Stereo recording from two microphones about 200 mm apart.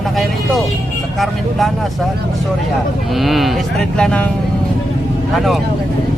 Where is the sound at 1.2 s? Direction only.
Centre (ahead or behind).